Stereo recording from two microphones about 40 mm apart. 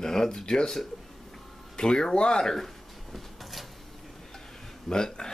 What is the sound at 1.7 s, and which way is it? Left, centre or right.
Speech, centre.